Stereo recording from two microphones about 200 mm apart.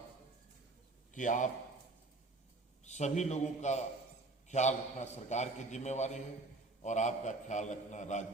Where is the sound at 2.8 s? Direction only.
35° left (ahead or behind).